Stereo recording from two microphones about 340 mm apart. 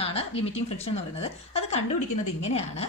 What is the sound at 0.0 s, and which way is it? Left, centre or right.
A woman's voice, centre.